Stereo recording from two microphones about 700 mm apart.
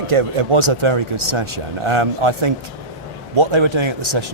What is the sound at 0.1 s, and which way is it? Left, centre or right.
Speech, right.